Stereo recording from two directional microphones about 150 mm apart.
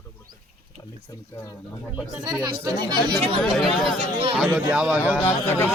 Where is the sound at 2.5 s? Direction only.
30° right (ahead or behind).